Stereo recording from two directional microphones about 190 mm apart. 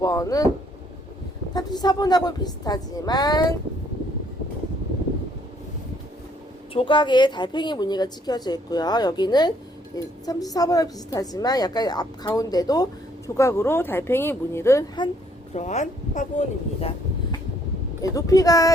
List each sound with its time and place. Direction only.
0.0 s a woman's voice: 20° left (ahead or behind)
1.5 s a woman's voice: 20° left (ahead or behind)
6.7 s a woman's voice: 25° left (ahead or behind)
15.5 s speech: 35° left (ahead or behind)
18.0 s a woman's voice: 20° left (ahead or behind)